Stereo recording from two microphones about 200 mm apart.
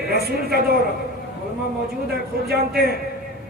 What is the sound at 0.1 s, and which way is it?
Speech, 50° right (ahead or behind).